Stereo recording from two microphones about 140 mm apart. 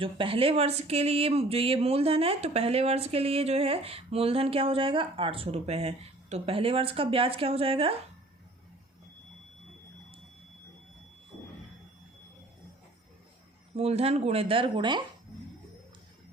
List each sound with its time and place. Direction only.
0.0 s speech: 40° right (ahead or behind)
13.7 s speech: 50° right (ahead or behind)